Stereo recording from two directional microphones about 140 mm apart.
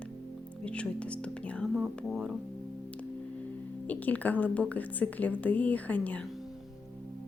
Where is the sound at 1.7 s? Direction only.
5° right (ahead or behind).